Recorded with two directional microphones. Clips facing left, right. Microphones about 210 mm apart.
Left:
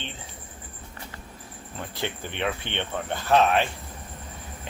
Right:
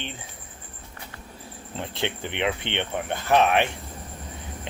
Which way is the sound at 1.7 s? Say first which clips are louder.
Right 3 dB; 25° right (ahead or behind).